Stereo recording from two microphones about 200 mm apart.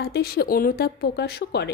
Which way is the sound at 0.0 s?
50° left (ahead or behind).